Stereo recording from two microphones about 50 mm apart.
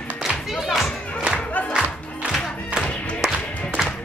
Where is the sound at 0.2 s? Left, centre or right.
Centre.